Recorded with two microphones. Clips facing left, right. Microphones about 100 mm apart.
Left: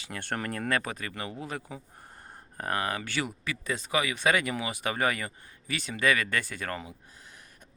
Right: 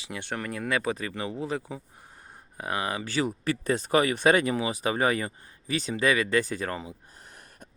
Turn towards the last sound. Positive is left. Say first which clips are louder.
# right 4 dB
turn(degrees=-50)  # may be behind; listen again after turning